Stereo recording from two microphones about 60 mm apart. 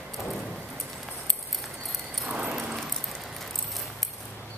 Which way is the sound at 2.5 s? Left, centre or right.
Centre.